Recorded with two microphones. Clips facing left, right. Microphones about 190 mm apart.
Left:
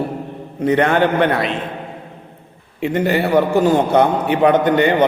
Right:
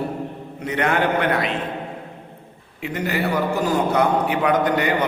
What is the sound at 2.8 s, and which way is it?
A man's voice, 30° left (ahead or behind).